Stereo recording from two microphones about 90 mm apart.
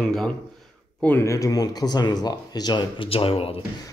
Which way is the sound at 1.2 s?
35° left (ahead or behind).